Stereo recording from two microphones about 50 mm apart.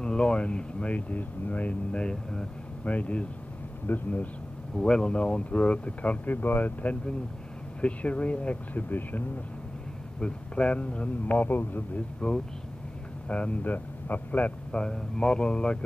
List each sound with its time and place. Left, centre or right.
0.0 s a man's voice: centre; by 4.3 s left
4.7 s speech: centre; by 9.2 s left
10.2 s speech: left
12.2 s a man's voice: centre
14.7 s speech: centre